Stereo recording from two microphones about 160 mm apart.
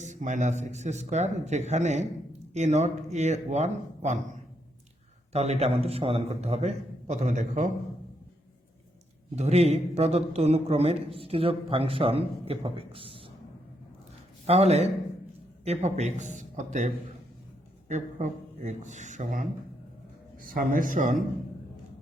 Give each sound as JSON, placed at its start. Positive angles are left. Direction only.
{"t": 0.0, "sound": "a man's voice", "side_deg": -50}
{"t": 5.3, "sound": "a man's voice", "side_deg": -40}
{"t": 9.3, "sound": "a man's voice", "side_deg": -40}
{"t": 14.4, "sound": "a man's voice", "side_deg": -40}